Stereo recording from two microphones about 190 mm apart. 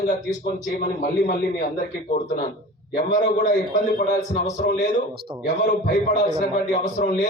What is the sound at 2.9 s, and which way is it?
A man's voice, 45° left (ahead or behind).